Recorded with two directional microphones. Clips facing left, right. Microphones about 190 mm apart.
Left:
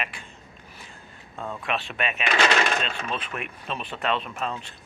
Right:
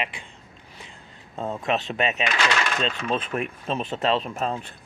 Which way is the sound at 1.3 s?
25° right (ahead or behind).